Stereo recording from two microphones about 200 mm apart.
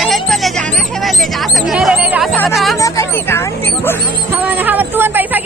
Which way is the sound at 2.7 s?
15° left (ahead or behind).